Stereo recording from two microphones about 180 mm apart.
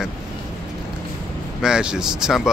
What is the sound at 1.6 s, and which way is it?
Speech, 5° right (ahead or behind).